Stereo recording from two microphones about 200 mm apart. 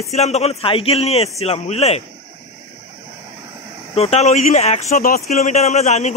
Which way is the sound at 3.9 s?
30° left (ahead or behind).